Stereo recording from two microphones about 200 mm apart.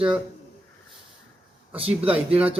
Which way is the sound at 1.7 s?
30° right (ahead or behind).